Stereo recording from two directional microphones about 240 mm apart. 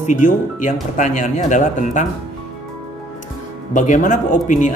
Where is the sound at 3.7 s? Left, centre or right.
Left.